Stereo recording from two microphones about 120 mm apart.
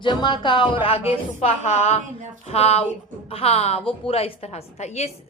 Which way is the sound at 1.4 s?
60° left (ahead or behind).